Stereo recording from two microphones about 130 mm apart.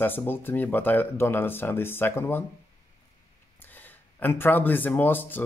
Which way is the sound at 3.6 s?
15° left (ahead or behind).